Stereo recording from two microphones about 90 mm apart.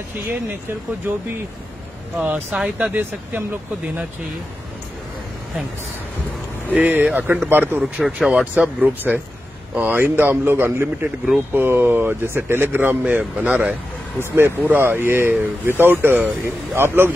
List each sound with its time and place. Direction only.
1.1 s speech: 20° right (ahead or behind)
2.5 s speech: 5° right (ahead or behind)
2.9 s speech: 20° right (ahead or behind)
6.7 s speech: 20° right (ahead or behind)
7.8 s speech: 10° right (ahead or behind); by 17.1 s 25° right (ahead or behind)